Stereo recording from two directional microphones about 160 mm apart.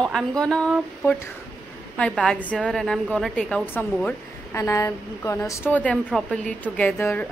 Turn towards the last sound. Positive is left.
turn(degrees=15)  # may be behind; listen again after turning